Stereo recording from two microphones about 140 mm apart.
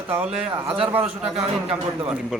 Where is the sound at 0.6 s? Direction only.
40° right (ahead or behind).